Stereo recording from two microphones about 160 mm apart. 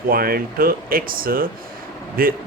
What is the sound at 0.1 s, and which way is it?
Speech, 65° right (ahead or behind).